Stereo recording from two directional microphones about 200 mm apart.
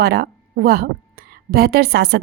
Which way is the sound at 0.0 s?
55° right (ahead or behind).